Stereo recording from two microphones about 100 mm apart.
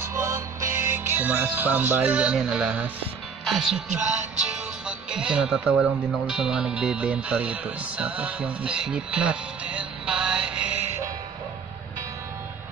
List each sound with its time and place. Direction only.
0.0 s music: 30° right (ahead or behind); by 2.9 s 10° right (ahead or behind)
3.4 s speech: centre (ahead or behind)